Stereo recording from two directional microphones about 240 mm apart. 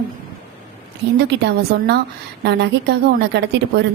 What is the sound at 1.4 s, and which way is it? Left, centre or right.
A woman's voice, right.